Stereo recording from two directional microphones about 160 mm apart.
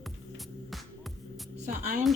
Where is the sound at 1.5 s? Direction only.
50° right (ahead or behind).